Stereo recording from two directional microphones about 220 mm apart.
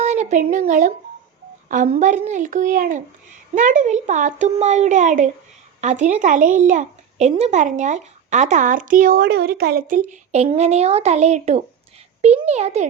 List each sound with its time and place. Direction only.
0.0 s a child's voice: 30° right (ahead or behind)